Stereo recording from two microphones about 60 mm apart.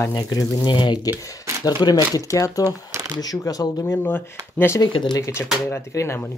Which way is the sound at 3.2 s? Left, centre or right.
Left.